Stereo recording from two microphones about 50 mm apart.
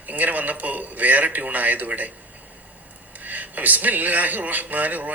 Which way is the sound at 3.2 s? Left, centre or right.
Right.